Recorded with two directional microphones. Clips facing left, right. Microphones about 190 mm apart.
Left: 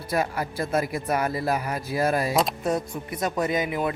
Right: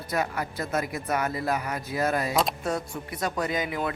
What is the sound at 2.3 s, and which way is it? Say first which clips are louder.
Speech: left 2 dB; centre (ahead or behind).